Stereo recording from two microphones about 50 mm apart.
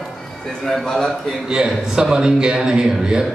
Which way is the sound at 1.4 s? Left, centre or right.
Centre.